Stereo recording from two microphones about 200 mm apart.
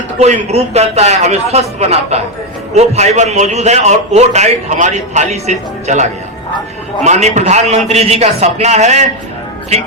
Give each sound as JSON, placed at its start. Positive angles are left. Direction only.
{"t": 0.2, "sound": "a man's voice", "side_deg": -35}